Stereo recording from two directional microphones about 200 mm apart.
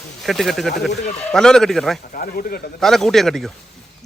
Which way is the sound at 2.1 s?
45° left (ahead or behind).